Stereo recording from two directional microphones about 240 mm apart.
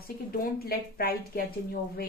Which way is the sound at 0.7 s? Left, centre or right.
Left.